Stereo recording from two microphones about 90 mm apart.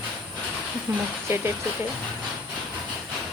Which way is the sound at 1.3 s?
30° right (ahead or behind).